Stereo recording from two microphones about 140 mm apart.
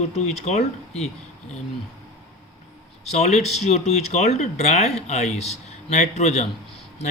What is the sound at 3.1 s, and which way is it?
Speech, 50° left (ahead or behind).